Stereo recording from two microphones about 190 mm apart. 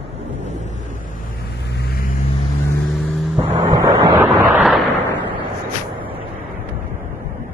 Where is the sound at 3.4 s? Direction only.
15° right (ahead or behind).